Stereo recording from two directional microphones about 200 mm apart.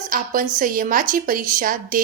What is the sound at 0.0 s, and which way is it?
A woman's voice, 40° right (ahead or behind).